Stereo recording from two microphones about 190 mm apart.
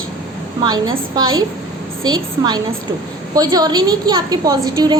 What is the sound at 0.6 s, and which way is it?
A woman's voice, 20° right (ahead or behind).